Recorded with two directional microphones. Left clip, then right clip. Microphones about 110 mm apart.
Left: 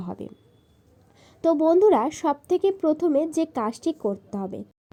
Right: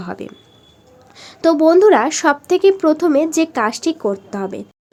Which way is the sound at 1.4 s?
40° right (ahead or behind).